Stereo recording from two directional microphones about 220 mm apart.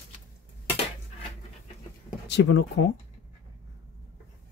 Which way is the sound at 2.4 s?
60° left (ahead or behind).